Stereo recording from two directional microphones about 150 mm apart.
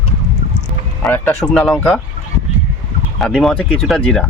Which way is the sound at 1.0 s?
15° left (ahead or behind).